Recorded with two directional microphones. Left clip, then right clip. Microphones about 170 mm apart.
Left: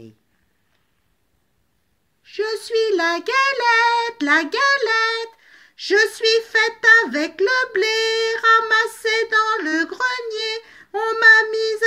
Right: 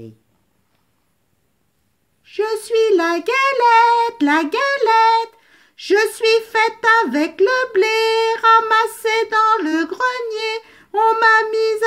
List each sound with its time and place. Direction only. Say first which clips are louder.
2.2 s child singing: right 3 dB; 35° right (ahead or behind)